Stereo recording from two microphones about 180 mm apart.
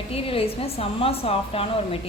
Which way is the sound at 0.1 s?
30° left (ahead or behind).